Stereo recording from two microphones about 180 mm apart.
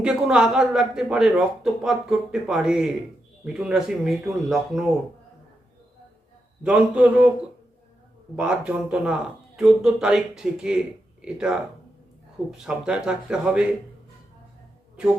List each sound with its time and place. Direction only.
0.0 s a man's voice: 5° right (ahead or behind)
6.6 s a man's voice: 5° right (ahead or behind)
8.4 s a man's voice: 5° right (ahead or behind)